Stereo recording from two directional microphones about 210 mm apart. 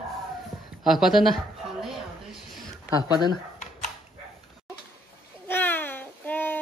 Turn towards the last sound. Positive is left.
turn(degrees=10)  # may be behind; listen again after turning